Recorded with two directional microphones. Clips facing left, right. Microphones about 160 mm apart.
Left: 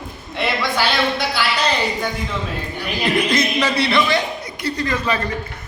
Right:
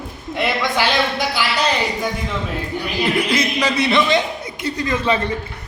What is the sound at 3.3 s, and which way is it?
A man's voice, 10° right (ahead or behind).